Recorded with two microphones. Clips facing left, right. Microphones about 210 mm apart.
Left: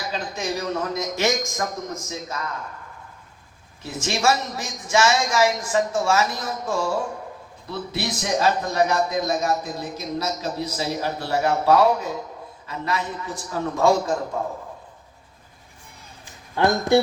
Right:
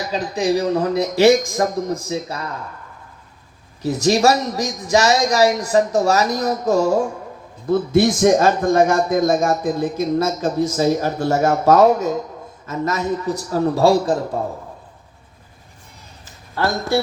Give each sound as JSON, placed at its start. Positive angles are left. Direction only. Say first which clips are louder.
{"t": 0.1, "sound": "a man's voice", "louder": "right 10 dB", "side_deg": -35}
{"t": 3.8, "sound": "a man's voice", "louder": "right 7 dB", "side_deg": -40}
{"t": 16.6, "sound": "speech", "louder": "left 2 dB", "side_deg": 15}